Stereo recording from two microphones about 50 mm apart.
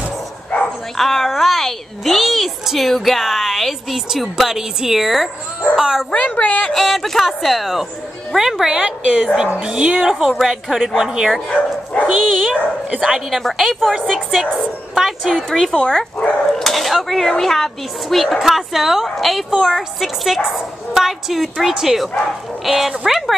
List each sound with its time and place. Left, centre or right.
0.9 s a woman's voice: centre
6.1 s speech: left
6.7 s a woman's voice: centre
9.5 s speech: right
10.1 s a woman's voice: centre
11.4 s bow-wow: left
12.1 s a woman's voice: centre
15.0 s a woman's voice: centre
15.3 s a woman's voice: centre